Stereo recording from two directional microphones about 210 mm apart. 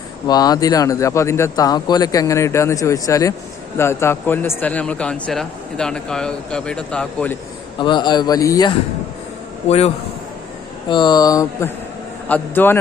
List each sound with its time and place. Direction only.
0.3 s a man's voice: 20° left (ahead or behind)
7.8 s speech: 20° left (ahead or behind)
9.6 s a man's voice: 30° left (ahead or behind); by 12.8 s 10° left (ahead or behind)